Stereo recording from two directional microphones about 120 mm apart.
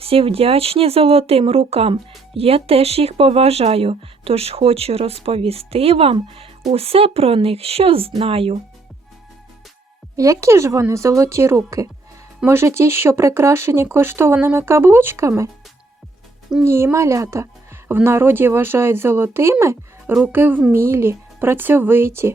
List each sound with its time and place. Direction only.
0.0 s speech: 55° right (ahead or behind)
10.2 s a woman's voice: 25° right (ahead or behind)
16.6 s a woman's voice: 20° right (ahead or behind)